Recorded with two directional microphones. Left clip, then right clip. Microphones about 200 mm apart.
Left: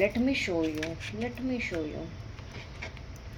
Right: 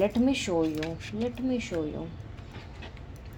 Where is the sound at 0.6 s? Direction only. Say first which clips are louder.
Right 2 dB; 5° right (ahead or behind).